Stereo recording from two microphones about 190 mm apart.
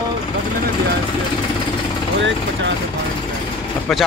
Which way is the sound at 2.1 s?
70° right (ahead or behind).